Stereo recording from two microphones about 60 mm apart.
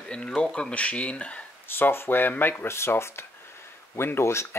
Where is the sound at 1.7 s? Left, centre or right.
Left.